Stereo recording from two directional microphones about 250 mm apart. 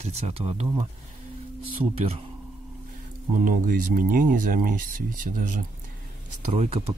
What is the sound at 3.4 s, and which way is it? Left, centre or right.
Speech, right.